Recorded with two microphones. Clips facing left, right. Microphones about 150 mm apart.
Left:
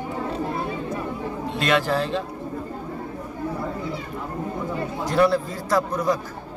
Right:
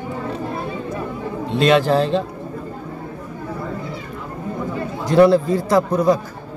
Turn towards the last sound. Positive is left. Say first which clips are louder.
# right 6 dB
turn(degrees=-25)  # may be behind; listen again after turning